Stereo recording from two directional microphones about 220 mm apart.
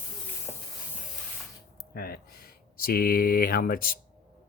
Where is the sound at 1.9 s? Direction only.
45° left (ahead or behind).